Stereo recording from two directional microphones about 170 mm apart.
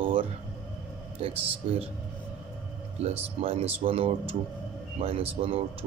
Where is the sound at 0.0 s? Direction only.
30° right (ahead or behind).